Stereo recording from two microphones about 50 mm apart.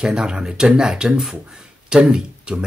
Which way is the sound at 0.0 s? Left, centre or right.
Centre.